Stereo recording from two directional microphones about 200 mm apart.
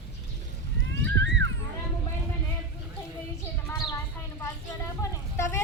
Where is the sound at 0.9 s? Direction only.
65° right (ahead or behind).